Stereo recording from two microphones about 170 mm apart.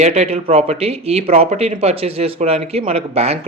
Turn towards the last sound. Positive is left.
turn(degrees=-40)  # may be behind; listen again after turning